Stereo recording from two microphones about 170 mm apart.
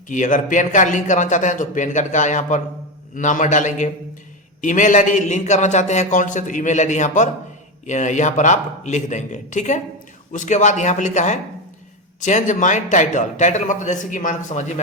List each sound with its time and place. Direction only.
0.1 s a man's voice: 50° left (ahead or behind)